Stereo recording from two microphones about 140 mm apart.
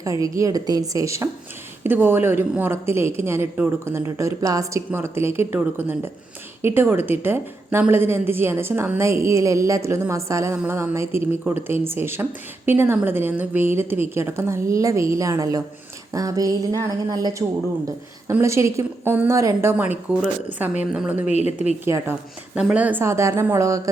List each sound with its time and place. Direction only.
0.0 s a woman's voice: 25° right (ahead or behind); by 21.2 s 10° right (ahead or behind)
21.2 s a woman's voice: 50° left (ahead or behind)
21.8 s speech: 20° right (ahead or behind)